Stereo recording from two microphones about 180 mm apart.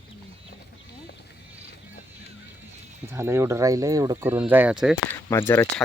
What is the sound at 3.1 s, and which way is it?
Speech, 15° right (ahead or behind).